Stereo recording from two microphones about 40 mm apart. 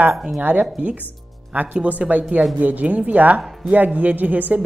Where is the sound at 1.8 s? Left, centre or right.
Right.